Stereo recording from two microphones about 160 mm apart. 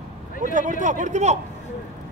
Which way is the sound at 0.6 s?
50° right (ahead or behind).